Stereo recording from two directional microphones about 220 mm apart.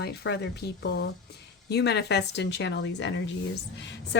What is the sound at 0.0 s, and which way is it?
A woman's voice, 50° left (ahead or behind).